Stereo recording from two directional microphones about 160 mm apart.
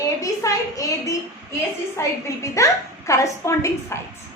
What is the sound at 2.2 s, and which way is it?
A woman's voice, 20° left (ahead or behind).